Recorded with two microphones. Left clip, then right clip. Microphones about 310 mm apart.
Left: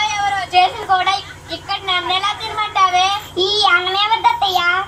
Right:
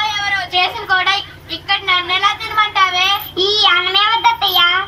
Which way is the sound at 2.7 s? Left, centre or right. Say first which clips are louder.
Left 4 dB; centre.